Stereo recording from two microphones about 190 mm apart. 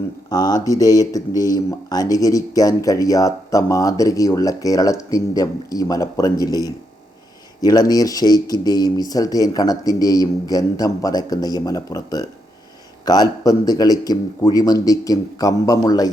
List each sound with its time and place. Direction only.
0.3 s speech: 20° left (ahead or behind)